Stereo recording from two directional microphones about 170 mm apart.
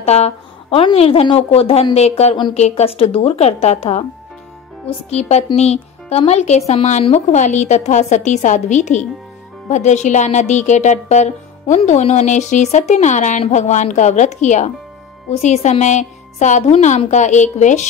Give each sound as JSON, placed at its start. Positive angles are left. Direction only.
{"t": 0.0, "sound": "a woman's voice", "side_deg": 40}